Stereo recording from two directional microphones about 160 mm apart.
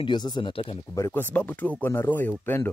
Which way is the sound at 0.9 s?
15° left (ahead or behind).